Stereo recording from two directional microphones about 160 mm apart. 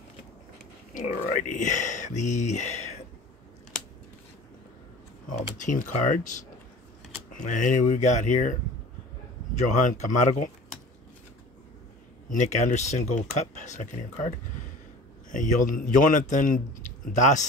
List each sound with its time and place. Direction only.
0.9 s a man's voice: 50° left (ahead or behind)
5.6 s a man's voice: 50° left (ahead or behind)
9.8 s a man's voice: 50° left (ahead or behind)
12.4 s a man's voice: 50° left (ahead or behind)
15.3 s a man's voice: 55° left (ahead or behind)